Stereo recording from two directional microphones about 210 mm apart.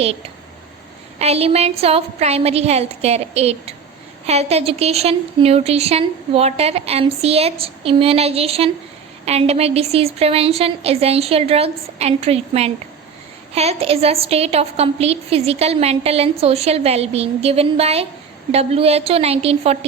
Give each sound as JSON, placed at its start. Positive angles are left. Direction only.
{"t": 1.2, "sound": "a woman's voice", "side_deg": -30}